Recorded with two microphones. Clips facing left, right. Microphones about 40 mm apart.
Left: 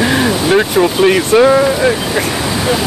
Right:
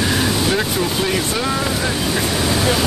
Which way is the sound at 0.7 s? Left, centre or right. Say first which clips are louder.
Left 9 dB; left.